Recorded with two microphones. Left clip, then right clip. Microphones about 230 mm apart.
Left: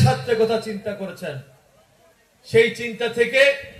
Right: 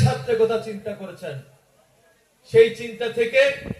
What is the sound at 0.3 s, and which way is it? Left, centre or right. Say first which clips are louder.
Speech: left 1 dB; left.